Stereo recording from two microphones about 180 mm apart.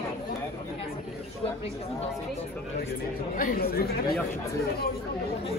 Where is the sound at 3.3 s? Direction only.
50° left (ahead or behind).